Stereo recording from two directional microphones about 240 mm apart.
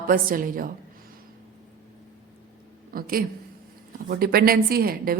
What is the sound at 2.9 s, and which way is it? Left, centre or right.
A man's voice, right.